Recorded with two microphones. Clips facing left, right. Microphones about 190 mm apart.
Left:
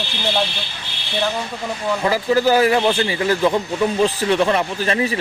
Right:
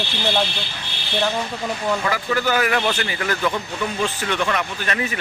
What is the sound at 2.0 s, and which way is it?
A man's voice, 30° left (ahead or behind).